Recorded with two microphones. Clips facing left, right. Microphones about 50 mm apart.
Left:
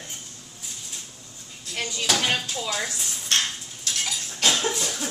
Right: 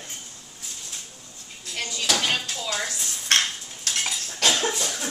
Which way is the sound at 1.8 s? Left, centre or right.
Centre.